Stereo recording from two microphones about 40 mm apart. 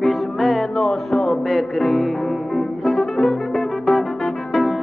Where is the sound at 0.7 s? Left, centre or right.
Centre.